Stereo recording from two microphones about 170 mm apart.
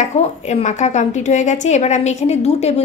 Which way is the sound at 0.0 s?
40° left (ahead or behind).